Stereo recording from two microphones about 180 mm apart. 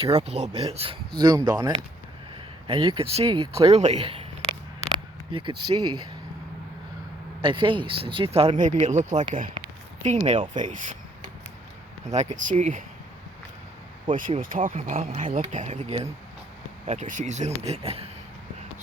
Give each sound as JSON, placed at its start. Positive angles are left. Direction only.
{"t": 0.0, "sound": "speech", "side_deg": -35}
{"t": 5.3, "sound": "speech", "side_deg": -25}
{"t": 7.4, "sound": "speech", "side_deg": -30}
{"t": 9.6, "sound": "a sound", "side_deg": -40}
{"t": 10.2, "sound": "speech", "side_deg": -40}
{"t": 12.0, "sound": "speech", "side_deg": -40}
{"t": 14.1, "sound": "speech", "side_deg": -50}